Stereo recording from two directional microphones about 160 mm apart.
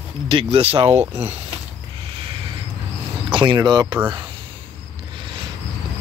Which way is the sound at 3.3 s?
30° right (ahead or behind).